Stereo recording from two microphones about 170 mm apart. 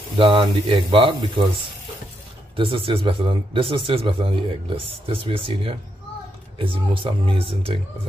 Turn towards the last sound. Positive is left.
turn(degrees=-30)  # may be behind; listen again after turning